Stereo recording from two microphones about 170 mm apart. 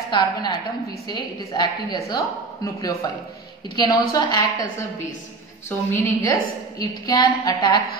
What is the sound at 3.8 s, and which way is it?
Speech, 25° left (ahead or behind).